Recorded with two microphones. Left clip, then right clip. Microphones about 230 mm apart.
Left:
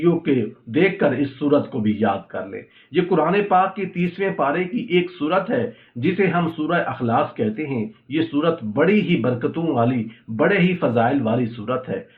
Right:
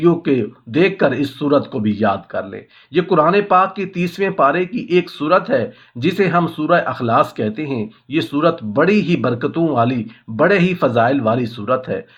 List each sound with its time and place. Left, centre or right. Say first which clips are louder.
0.0 s speech: right 4 dB; right